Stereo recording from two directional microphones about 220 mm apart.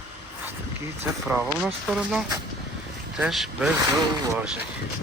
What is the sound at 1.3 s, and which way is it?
Speech, 5° right (ahead or behind).